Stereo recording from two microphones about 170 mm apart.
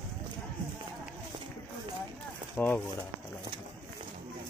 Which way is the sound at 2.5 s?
10° left (ahead or behind).